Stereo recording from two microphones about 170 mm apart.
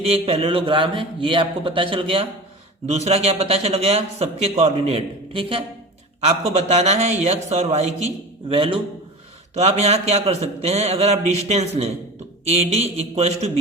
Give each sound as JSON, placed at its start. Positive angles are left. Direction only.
{"t": 0.0, "sound": "a man's voice", "side_deg": -35}